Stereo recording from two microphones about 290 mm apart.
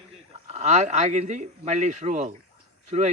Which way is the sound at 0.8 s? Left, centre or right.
Right.